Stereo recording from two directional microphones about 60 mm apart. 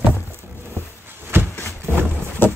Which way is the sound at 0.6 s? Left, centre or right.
Right.